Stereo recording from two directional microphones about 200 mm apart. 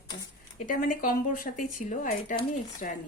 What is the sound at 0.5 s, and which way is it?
Speech, 40° left (ahead or behind).